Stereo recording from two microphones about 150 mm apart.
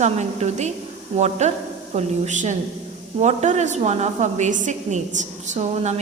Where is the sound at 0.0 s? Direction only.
50° right (ahead or behind).